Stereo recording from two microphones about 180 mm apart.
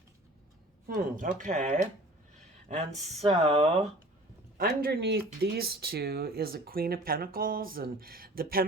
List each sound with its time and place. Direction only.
0.9 s speech: 50° right (ahead or behind)
3.2 s speech: 35° right (ahead or behind)
4.5 s speech: 55° right (ahead or behind)